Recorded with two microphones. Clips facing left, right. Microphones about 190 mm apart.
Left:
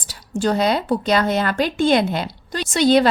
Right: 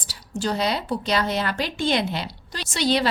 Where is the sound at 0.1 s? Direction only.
55° left (ahead or behind).